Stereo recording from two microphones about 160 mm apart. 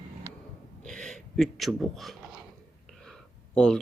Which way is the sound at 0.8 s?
5° left (ahead or behind).